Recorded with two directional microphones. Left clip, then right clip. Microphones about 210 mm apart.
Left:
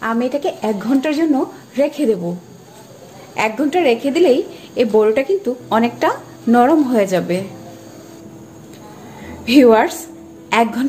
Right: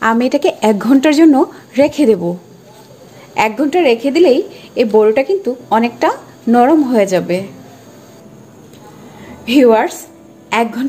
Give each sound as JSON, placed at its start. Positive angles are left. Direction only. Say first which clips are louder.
{"t": 0.0, "sound": "a woman's voice", "louder": "right 6 dB", "side_deg": -30}
{"t": 3.3, "sound": "a woman's voice", "louder": "right 4 dB", "side_deg": -20}
{"t": 9.4, "sound": "a woman's voice", "louder": "right 1 dB", "side_deg": 0}